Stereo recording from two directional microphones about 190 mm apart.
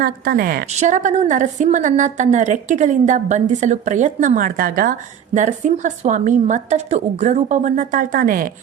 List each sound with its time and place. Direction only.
0.0 s a woman's voice: 50° right (ahead or behind)
0.7 s a woman's voice: 40° right (ahead or behind)